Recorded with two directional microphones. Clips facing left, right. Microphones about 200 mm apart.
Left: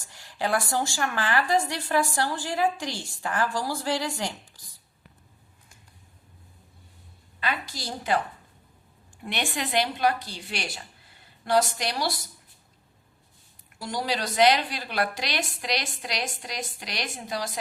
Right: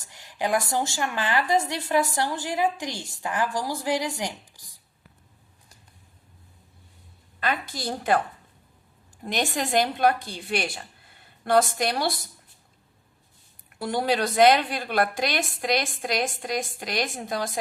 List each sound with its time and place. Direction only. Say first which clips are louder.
0.1 s a woman's voice: right 2 dB; 20° right (ahead or behind)
7.3 s a woman's voice: right 3 dB; 50° right (ahead or behind)
9.2 s a woman's voice: right 4 dB; 40° right (ahead or behind)
13.7 s a woman's voice: right 5 dB; 55° right (ahead or behind)